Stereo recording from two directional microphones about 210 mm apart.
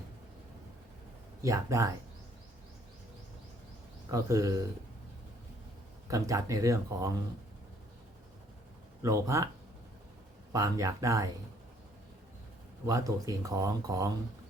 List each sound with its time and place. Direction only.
1.4 s speech: 15° right (ahead or behind)
4.1 s speech: 15° right (ahead or behind)
6.1 s speech: 15° right (ahead or behind)
9.0 s speech: 15° right (ahead or behind)
10.5 s speech: 15° right (ahead or behind)
12.8 s speech: 15° right (ahead or behind)